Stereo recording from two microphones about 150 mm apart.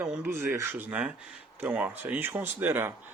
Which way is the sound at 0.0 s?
15° right (ahead or behind).